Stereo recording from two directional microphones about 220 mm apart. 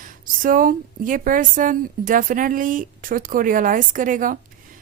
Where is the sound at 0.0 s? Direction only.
40° right (ahead or behind).